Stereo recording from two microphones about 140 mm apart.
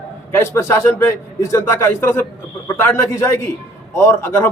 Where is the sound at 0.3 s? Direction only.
20° left (ahead or behind).